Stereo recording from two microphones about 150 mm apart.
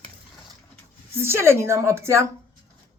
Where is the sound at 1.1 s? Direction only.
15° right (ahead or behind).